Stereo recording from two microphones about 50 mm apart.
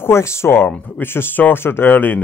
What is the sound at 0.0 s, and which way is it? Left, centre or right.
Speech, left.